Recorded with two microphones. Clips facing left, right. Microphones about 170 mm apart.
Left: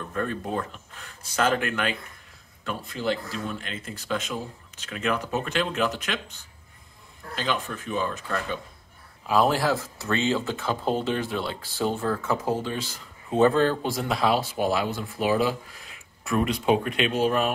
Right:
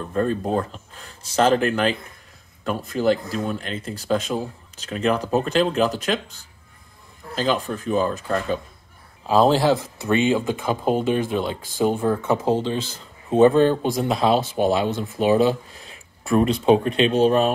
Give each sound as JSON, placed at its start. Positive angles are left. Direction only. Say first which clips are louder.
{"t": 0.0, "sound": "speech", "louder": "right 7 dB", "side_deg": -30}
{"t": 2.6, "sound": "speech", "louder": "right 8 dB", "side_deg": -45}
{"t": 7.3, "sound": "speech", "louder": "right 6 dB", "side_deg": -35}